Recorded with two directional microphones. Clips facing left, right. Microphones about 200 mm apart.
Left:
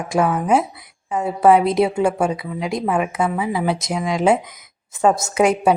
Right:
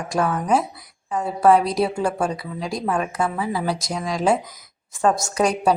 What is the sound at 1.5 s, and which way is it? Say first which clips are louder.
A woman's voice: left 4 dB; 25° left (ahead or behind).